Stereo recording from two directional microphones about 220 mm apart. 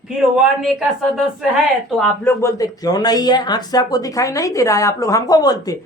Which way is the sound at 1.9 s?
10° left (ahead or behind).